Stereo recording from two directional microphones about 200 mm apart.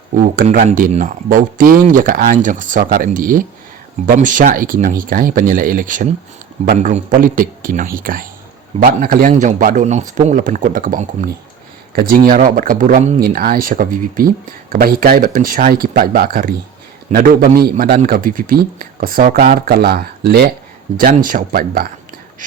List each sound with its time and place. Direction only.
0.2 s a man's voice: 45° right (ahead or behind)